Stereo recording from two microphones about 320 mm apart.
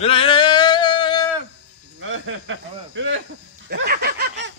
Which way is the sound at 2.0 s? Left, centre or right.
Right.